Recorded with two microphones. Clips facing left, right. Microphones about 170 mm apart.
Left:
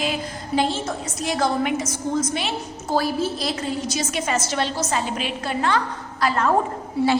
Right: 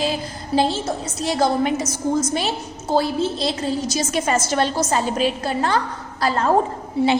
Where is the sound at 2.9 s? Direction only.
25° right (ahead or behind).